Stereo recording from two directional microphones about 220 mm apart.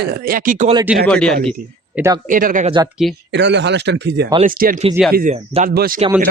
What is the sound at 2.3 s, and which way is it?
Speech, 35° right (ahead or behind).